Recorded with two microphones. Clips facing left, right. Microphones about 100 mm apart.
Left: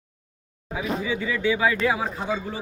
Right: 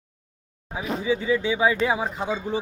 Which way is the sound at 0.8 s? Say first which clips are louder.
Right 1 dB; 25° right (ahead or behind).